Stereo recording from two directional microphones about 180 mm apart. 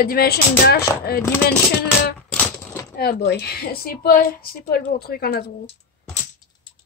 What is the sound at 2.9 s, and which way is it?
A woman's voice, 55° left (ahead or behind).